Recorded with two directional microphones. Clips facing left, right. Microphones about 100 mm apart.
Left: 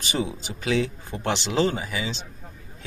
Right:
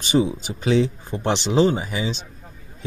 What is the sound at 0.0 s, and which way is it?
Speech, 20° right (ahead or behind).